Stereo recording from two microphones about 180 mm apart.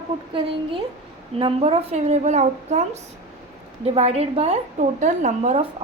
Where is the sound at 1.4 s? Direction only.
30° right (ahead or behind).